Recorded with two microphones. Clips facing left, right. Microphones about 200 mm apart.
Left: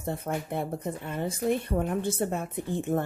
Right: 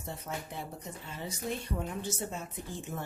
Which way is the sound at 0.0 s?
55° left (ahead or behind).